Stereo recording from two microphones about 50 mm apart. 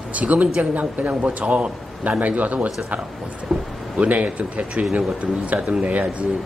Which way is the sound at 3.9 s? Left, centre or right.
Right.